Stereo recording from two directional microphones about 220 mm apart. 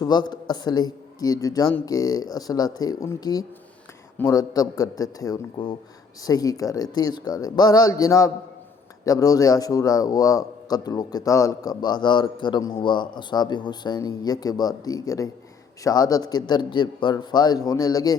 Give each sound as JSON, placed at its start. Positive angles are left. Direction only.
{"t": 0.0, "sound": "a man's voice", "side_deg": 20}